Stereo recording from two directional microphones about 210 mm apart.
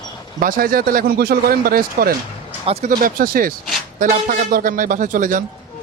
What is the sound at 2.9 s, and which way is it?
Speech, 40° right (ahead or behind).